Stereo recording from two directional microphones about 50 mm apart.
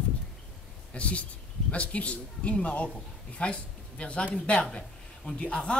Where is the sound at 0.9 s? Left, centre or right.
Left.